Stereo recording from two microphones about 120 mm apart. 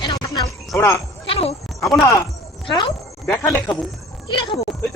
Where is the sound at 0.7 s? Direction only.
20° left (ahead or behind).